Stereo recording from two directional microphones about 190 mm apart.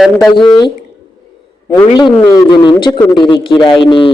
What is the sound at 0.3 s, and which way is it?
Speech, 25° left (ahead or behind).